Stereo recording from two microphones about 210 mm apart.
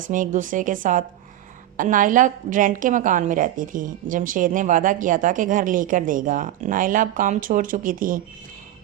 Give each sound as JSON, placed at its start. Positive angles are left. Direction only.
{"t": 0.1, "sound": "a woman's voice", "side_deg": -40}